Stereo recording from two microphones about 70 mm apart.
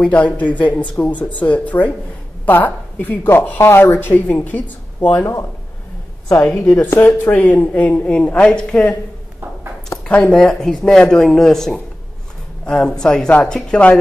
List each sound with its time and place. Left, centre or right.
0.0 s a woman's voice: centre
5.2 s speech: left; by 8.9 s centre
10.0 s speech: centre